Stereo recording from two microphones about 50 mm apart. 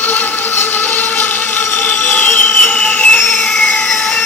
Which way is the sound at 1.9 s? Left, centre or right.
Left.